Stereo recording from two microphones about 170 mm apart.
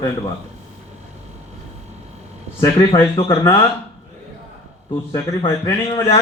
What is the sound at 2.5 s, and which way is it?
A man's voice, 20° left (ahead or behind).